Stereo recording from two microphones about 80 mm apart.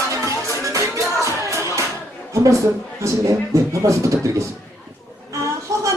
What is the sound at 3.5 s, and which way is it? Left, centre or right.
Speech, right.